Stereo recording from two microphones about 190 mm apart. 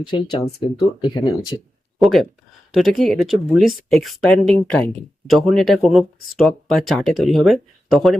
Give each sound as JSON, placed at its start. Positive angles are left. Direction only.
{"t": 0.1, "sound": "speech", "side_deg": 30}
{"t": 2.0, "sound": "speech", "side_deg": 0}